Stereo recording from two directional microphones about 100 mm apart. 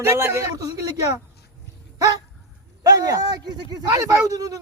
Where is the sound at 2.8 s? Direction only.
35° right (ahead or behind).